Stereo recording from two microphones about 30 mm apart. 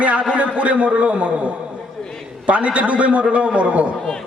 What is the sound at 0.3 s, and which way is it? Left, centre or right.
A man's voice, right.